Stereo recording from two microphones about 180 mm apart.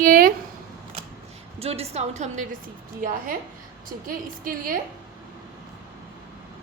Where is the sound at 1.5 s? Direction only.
35° right (ahead or behind).